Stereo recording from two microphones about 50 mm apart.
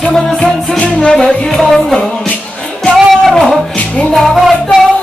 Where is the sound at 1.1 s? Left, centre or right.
Centre.